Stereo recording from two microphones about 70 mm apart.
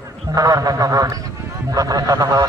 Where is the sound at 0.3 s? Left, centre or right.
Right.